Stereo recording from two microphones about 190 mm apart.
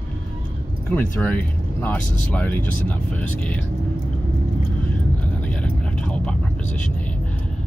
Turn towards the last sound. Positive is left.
turn(degrees=5)  # may be behind; listen again after turning